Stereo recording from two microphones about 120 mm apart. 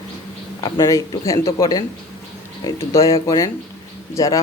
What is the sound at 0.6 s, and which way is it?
A man's voice, 30° left (ahead or behind).